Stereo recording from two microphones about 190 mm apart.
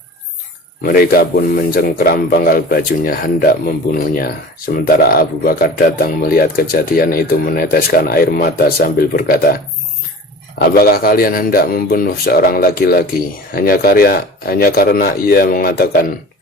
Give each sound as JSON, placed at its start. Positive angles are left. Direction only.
{"t": 0.8, "sound": "speech", "side_deg": 50}
{"t": 10.6, "sound": "speech", "side_deg": 55}